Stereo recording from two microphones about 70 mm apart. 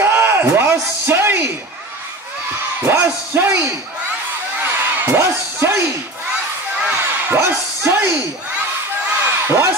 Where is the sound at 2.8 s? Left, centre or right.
Right.